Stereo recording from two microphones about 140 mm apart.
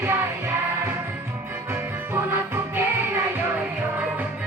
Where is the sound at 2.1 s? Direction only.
15° right (ahead or behind).